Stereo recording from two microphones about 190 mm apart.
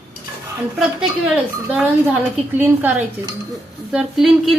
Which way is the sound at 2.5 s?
10° right (ahead or behind).